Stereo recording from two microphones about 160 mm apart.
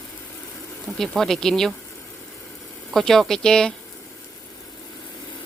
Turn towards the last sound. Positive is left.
turn(degrees=5)  # may be behind; listen again after turning